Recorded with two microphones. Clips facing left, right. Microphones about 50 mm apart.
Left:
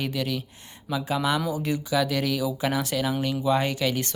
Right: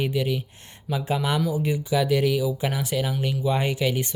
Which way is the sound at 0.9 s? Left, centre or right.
Right.